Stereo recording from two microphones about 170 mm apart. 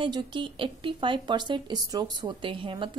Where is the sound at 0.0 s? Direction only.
30° right (ahead or behind).